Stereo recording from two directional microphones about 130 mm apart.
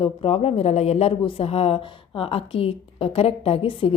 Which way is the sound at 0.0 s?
50° left (ahead or behind).